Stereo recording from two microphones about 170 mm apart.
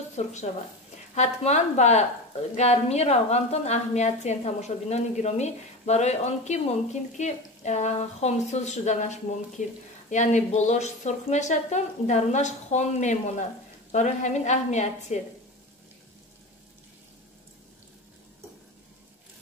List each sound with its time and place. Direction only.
0.1 s a woman's voice: 40° left (ahead or behind)